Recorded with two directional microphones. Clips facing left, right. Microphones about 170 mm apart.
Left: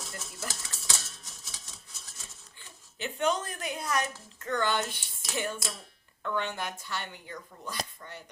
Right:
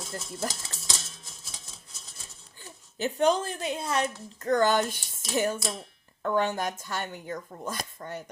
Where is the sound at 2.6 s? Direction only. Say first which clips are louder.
Right 7 dB; 40° right (ahead or behind).